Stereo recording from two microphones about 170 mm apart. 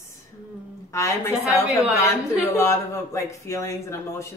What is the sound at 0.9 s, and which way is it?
Speech, 20° left (ahead or behind).